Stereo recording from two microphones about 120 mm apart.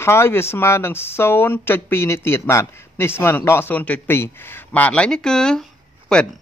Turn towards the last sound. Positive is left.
turn(degrees=5)  # may be behind; listen again after turning